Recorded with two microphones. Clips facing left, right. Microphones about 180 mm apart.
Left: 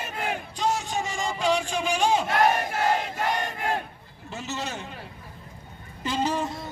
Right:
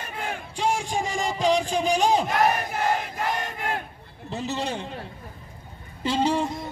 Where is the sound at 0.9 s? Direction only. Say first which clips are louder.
Right 2 dB; 35° right (ahead or behind).